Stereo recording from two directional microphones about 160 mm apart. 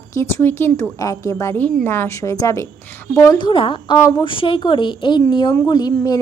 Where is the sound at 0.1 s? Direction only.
15° left (ahead or behind).